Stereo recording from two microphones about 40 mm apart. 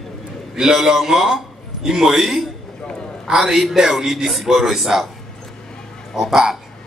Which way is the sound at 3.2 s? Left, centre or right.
Centre.